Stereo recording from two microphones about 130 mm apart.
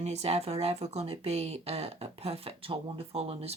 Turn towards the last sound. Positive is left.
turn(degrees=-50)  # may be behind; listen again after turning